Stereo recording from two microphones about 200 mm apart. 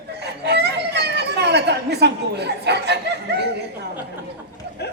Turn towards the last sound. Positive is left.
turn(degrees=-55)  # may be behind; listen again after turning